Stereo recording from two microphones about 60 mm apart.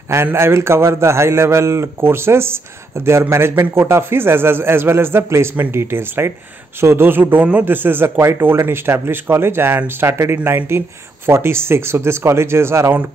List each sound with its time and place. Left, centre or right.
0.1 s a man's voice: right